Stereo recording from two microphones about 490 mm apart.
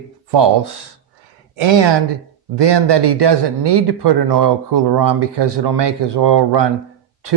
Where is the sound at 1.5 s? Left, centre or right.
Right.